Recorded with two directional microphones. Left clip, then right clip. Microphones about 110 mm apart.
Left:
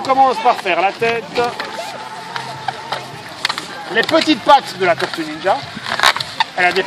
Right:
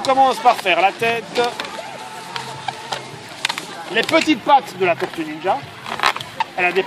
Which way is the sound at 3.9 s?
10° right (ahead or behind).